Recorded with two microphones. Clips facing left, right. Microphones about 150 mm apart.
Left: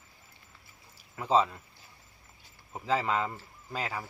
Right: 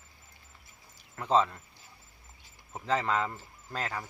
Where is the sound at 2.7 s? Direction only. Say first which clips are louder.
Even; 5° left (ahead or behind).